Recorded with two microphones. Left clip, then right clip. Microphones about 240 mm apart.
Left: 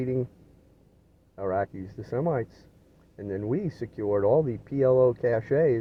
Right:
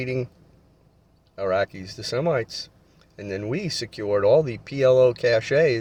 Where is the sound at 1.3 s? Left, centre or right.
Right.